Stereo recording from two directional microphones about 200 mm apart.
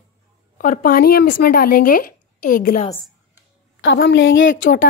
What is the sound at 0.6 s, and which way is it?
Speech, 45° left (ahead or behind).